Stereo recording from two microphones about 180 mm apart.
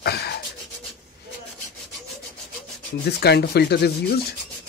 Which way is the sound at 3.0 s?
65° left (ahead or behind).